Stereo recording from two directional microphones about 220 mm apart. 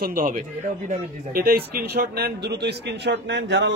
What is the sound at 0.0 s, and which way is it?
A man's voice, 40° right (ahead or behind).